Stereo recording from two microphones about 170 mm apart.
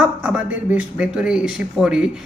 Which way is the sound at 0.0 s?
10° right (ahead or behind).